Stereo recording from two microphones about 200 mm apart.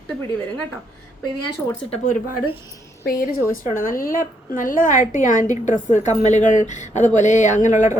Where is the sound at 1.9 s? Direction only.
40° left (ahead or behind).